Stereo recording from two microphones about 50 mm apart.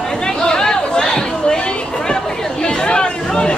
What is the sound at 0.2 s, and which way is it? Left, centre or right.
Chatter, centre.